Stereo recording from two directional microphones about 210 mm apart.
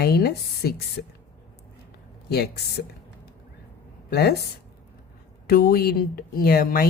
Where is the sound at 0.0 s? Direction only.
50° left (ahead or behind).